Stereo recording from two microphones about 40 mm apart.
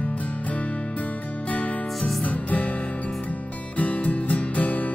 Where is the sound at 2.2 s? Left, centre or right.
Left.